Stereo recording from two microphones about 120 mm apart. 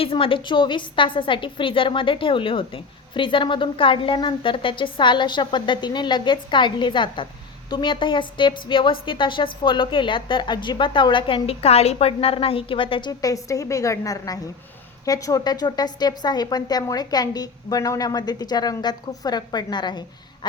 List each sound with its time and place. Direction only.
0.0 s a woman's voice: 50° left (ahead or behind)
11.4 s a woman's voice: 60° left (ahead or behind); by 20.5 s 35° left (ahead or behind)